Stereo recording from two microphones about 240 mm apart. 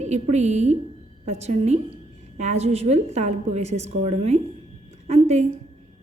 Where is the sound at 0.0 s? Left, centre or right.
Right.